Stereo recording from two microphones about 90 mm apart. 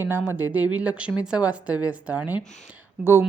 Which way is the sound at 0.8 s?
15° right (ahead or behind).